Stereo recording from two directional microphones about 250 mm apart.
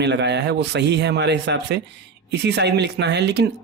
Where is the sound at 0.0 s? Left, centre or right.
Right.